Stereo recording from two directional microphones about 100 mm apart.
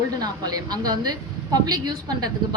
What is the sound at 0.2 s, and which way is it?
A woman's voice, 40° right (ahead or behind).